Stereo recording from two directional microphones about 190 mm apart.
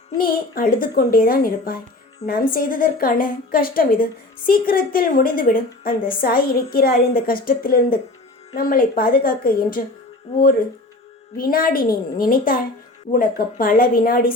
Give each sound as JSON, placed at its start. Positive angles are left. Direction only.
{"t": 0.2, "sound": "a woman's voice", "side_deg": 50}
{"t": 11.3, "sound": "a woman's voice", "side_deg": 50}